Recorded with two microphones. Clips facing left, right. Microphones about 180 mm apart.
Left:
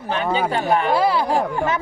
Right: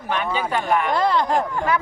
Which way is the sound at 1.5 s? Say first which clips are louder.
Even; 25° left (ahead or behind).